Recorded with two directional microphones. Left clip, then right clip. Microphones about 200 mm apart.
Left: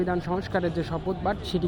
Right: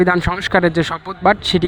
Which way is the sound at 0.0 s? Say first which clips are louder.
Right 12 dB; 30° right (ahead or behind).